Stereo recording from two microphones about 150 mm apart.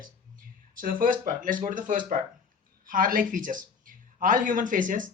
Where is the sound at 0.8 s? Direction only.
65° right (ahead or behind).